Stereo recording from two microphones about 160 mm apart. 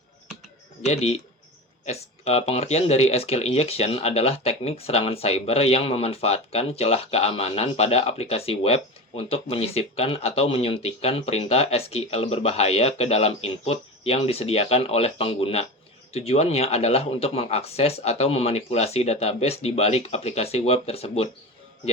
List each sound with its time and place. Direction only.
1.8 s speech: 40° left (ahead or behind)